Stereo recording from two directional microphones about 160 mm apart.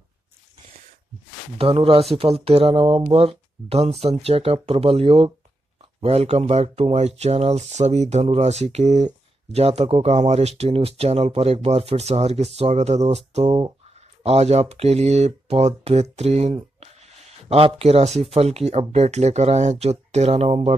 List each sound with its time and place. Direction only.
1.6 s speech: 35° right (ahead or behind)